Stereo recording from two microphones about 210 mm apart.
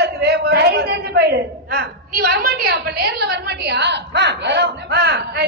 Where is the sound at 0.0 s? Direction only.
55° right (ahead or behind).